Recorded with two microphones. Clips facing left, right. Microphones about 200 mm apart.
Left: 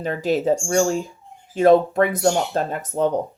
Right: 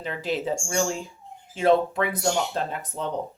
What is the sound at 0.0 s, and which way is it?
Speech, 45° left (ahead or behind).